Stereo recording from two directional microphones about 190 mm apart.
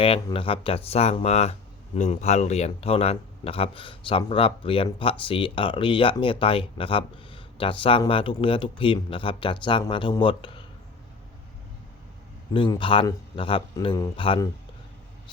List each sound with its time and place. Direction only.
0.0 s speech: 25° left (ahead or behind)
12.5 s speech: 25° left (ahead or behind)